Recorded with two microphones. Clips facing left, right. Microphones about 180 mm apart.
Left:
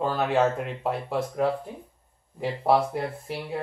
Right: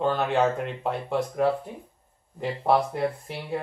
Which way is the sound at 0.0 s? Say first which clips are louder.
Even; 5° left (ahead or behind).